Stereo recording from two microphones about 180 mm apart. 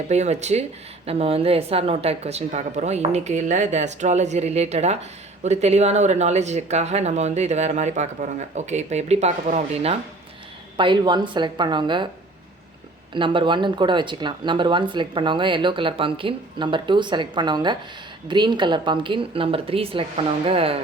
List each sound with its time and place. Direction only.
0.1 s speech: 40° right (ahead or behind)
10.8 s speech: 25° right (ahead or behind)
13.1 s speech: 25° right (ahead or behind)